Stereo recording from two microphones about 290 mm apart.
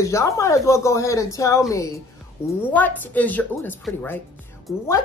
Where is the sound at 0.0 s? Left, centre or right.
Centre.